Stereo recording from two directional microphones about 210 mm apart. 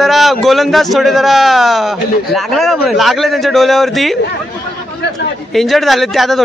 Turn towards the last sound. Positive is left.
turn(degrees=0)  # may be behind; listen again after turning